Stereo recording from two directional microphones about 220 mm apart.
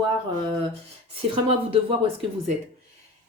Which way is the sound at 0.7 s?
25° right (ahead or behind).